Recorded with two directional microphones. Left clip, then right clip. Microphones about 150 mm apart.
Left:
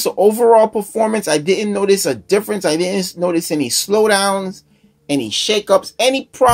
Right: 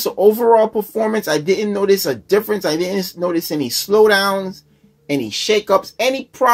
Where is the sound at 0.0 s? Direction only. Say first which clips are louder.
Left 1 dB; 30° left (ahead or behind).